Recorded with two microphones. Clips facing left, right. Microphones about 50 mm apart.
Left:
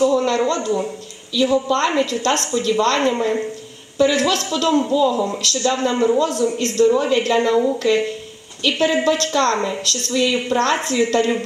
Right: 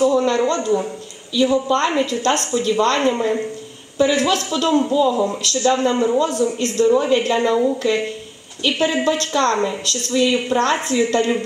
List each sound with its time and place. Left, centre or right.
0.0 s speech: centre